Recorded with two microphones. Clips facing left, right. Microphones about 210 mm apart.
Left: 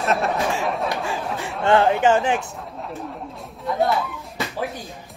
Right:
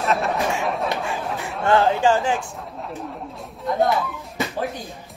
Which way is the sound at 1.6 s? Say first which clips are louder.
Left 1 dB; 25° left (ahead or behind).